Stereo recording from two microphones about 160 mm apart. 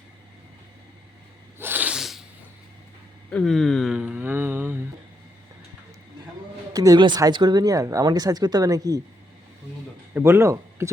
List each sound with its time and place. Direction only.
1.5 s sneeze: 10° right (ahead or behind)
3.3 s a sound: centre (ahead or behind)
6.7 s speech: 25° right (ahead or behind)
10.2 s speech: 15° right (ahead or behind)